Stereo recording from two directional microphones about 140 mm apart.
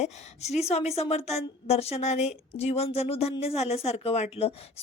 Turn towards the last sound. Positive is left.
turn(degrees=45)  # may be behind; listen again after turning